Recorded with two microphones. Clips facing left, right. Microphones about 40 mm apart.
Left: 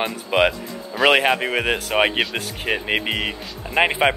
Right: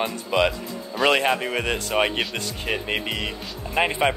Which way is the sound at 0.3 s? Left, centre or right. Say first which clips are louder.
Left 3 dB; left.